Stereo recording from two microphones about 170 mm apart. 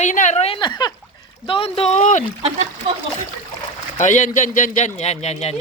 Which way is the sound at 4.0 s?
50° left (ahead or behind).